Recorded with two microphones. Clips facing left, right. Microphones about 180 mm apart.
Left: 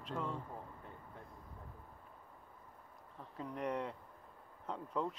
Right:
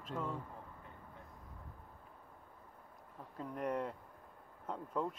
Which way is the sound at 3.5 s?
50° right (ahead or behind).